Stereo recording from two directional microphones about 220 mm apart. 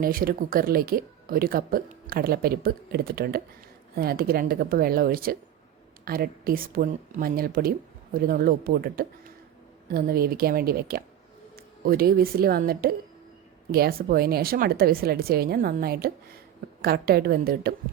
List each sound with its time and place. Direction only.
0.0 s speech: 40° right (ahead or behind)